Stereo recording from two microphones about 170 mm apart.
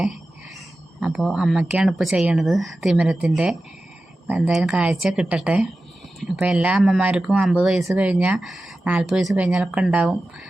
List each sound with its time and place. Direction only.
0.9 s speech: 5° right (ahead or behind)